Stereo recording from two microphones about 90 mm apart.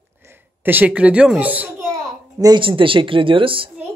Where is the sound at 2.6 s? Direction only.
75° right (ahead or behind).